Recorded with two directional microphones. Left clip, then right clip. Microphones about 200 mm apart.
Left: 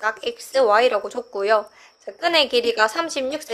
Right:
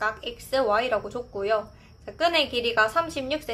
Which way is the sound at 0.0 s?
30° left (ahead or behind).